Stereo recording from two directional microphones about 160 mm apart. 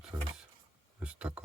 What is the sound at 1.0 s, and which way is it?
Speech, 5° right (ahead or behind).